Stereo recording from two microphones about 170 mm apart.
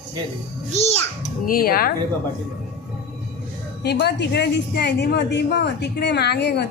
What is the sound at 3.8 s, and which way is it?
A woman's voice, 75° left (ahead or behind).